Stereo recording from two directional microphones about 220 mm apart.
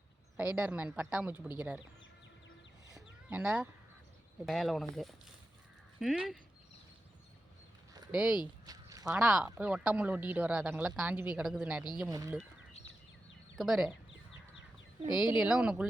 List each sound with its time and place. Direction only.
0.3 s speech: 5° right (ahead or behind)
2.9 s a sound: 5° right (ahead or behind)
4.4 s speech: centre (ahead or behind)
8.1 s speech: 5° right (ahead or behind)
8.6 s a sound: 15° right (ahead or behind)
9.0 s speech: 5° right (ahead or behind)
13.6 s speech: centre (ahead or behind)
15.4 s speech: 5° right (ahead or behind)